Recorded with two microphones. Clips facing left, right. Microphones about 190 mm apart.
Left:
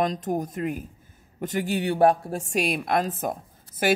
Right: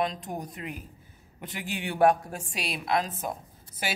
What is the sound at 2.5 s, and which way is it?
Speech, 50° left (ahead or behind).